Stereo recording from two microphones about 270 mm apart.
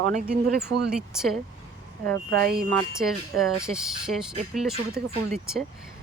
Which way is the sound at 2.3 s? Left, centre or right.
Centre.